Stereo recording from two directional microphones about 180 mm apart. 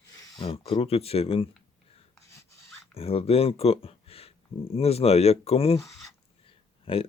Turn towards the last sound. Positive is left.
turn(degrees=30)  # may be behind; listen again after turning